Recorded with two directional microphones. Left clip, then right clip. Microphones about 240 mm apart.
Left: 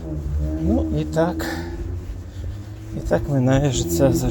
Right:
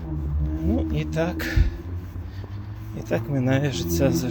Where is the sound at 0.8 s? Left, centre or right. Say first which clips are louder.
Left 6 dB; left.